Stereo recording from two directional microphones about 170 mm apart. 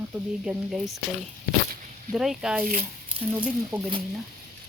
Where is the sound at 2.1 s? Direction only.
Centre (ahead or behind).